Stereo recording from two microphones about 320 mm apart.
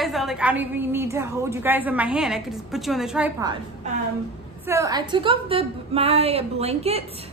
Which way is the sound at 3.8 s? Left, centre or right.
Right.